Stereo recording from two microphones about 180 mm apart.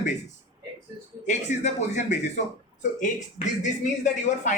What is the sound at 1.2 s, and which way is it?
Speech, 40° left (ahead or behind).